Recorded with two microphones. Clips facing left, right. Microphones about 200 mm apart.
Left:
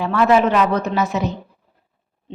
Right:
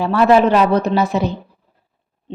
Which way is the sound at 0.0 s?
35° right (ahead or behind).